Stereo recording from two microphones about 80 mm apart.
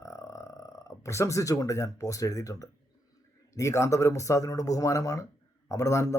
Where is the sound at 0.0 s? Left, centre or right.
Left.